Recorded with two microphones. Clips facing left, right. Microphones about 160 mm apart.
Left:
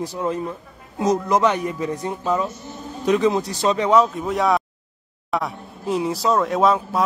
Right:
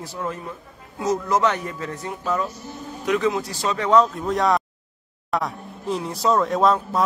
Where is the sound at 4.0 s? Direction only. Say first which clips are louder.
Left 1 dB; 5° left (ahead or behind).